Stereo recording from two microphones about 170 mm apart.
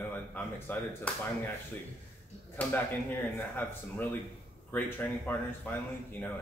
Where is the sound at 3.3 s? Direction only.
10° left (ahead or behind).